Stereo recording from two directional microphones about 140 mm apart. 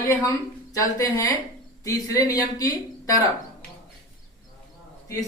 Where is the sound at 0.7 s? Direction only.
25° left (ahead or behind).